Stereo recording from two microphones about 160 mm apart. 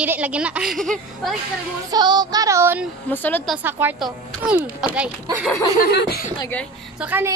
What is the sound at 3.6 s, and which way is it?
A woman's voice, 15° right (ahead or behind).